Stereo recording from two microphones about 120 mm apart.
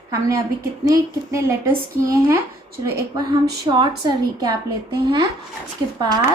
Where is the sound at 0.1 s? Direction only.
25° right (ahead or behind).